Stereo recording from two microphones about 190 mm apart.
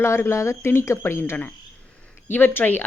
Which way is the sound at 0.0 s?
15° left (ahead or behind).